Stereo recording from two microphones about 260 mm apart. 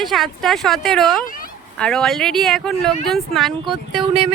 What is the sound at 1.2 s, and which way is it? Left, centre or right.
Speech, left.